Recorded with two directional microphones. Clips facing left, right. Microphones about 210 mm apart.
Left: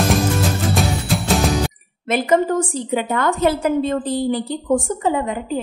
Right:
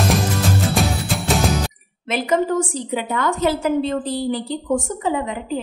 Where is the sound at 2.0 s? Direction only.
50° left (ahead or behind).